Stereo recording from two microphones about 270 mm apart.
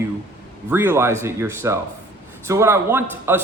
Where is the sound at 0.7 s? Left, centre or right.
Centre.